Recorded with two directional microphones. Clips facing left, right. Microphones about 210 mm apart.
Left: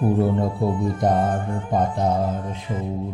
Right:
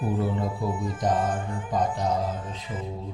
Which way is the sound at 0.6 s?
60° left (ahead or behind).